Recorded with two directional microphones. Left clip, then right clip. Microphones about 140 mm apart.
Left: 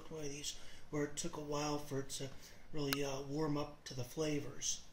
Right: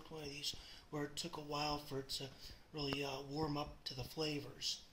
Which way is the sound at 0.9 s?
15° right (ahead or behind).